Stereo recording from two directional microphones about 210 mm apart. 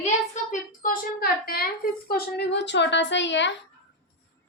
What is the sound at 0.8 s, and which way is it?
A woman's voice, 45° left (ahead or behind).